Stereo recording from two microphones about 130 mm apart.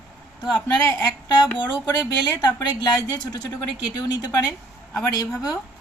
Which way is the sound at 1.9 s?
25° left (ahead or behind).